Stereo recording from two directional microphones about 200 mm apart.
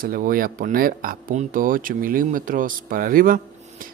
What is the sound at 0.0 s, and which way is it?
Speech, 45° right (ahead or behind).